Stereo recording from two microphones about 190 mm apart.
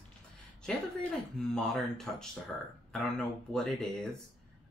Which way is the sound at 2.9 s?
5° left (ahead or behind).